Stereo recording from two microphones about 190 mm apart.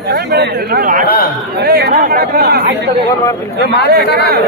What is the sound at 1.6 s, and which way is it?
Speech, 60° right (ahead or behind).